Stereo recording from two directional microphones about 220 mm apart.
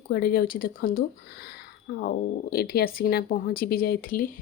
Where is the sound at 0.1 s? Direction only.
45° left (ahead or behind).